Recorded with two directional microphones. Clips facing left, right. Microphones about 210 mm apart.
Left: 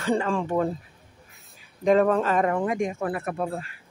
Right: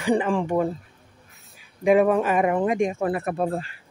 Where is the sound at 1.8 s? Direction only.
10° right (ahead or behind).